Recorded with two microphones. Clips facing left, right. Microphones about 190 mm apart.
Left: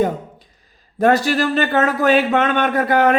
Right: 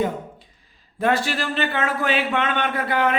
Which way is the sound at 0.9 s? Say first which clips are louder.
Left 6 dB; 40° left (ahead or behind).